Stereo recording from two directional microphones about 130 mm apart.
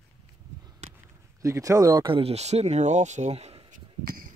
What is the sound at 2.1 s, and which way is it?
Speech, 50° right (ahead or behind).